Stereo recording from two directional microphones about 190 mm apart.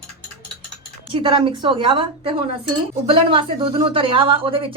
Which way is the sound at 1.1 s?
30° right (ahead or behind).